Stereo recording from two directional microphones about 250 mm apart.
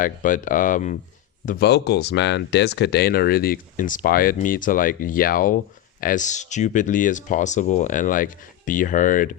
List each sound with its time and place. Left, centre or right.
0.0 s speech: left